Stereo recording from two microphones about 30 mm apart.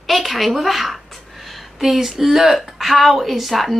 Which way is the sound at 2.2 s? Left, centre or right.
Centre.